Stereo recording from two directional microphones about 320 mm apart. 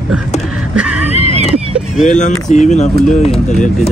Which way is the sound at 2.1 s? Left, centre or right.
Left.